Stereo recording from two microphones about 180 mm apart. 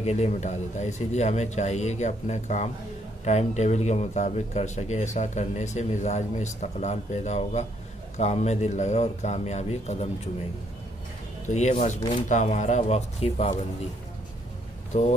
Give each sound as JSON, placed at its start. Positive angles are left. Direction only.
{"t": 0.0, "sound": "speech", "side_deg": 40}
{"t": 11.4, "sound": "speech", "side_deg": 40}
{"t": 14.9, "sound": "speech", "side_deg": 35}